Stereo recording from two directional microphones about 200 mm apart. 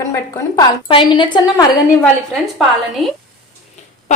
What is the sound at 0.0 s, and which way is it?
A woman's voice, 15° left (ahead or behind).